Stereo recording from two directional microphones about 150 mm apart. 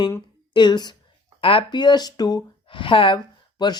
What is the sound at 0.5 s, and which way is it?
Speech, 30° left (ahead or behind).